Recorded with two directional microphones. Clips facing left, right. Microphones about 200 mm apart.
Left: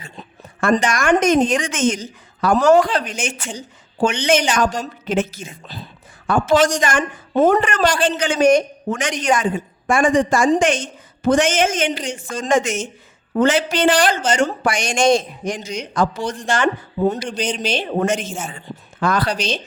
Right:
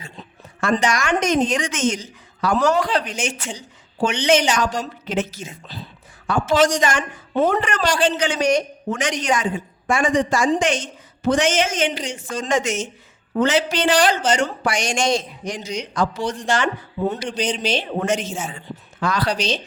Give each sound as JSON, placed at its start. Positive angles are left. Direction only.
{"t": 0.6, "sound": "a woman's voice", "side_deg": 50}